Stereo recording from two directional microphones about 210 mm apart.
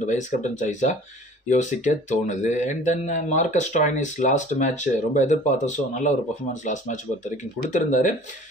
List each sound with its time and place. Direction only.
0.0 s speech: 35° left (ahead or behind)